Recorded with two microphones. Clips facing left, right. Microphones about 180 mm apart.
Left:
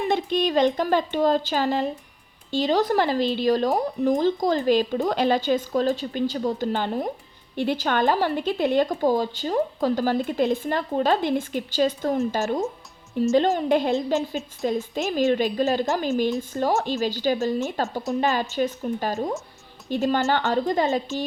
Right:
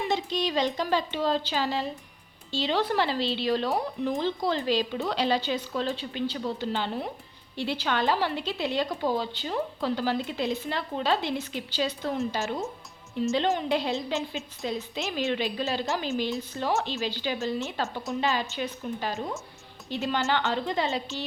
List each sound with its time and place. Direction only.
0.1 s speech: 55° left (ahead or behind)